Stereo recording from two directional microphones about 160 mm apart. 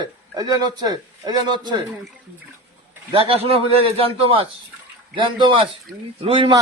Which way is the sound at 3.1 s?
35° right (ahead or behind).